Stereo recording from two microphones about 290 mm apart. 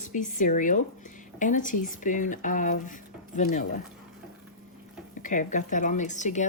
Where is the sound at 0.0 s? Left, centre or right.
Left.